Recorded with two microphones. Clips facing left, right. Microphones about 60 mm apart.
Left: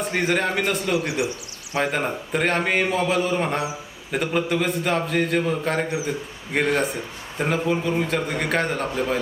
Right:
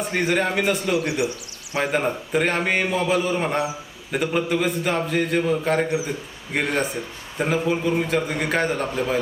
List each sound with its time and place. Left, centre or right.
0.0 s a man's voice: centre
0.9 s speech: left
1.7 s a man's voice: centre